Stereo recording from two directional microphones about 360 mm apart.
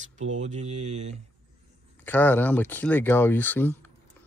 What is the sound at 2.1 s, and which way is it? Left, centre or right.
Speech, centre.